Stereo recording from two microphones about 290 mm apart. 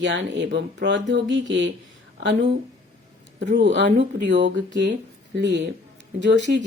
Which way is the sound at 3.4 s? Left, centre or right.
Right.